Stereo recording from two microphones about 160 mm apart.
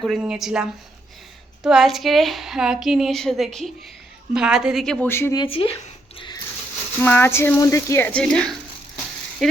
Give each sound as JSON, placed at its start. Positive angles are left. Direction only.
{"t": 0.0, "sound": "a woman's voice", "side_deg": -5}
{"t": 5.0, "sound": "a woman's voice", "side_deg": 15}
{"t": 5.4, "sound": "speech", "side_deg": 35}
{"t": 6.1, "sound": "a sound", "side_deg": 30}
{"t": 7.0, "sound": "a woman's voice", "side_deg": 15}